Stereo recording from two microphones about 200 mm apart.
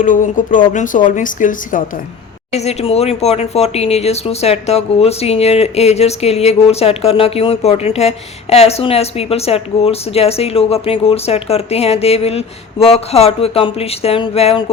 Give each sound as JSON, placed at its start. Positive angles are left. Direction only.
{"t": 0.0, "sound": "speech", "side_deg": 40}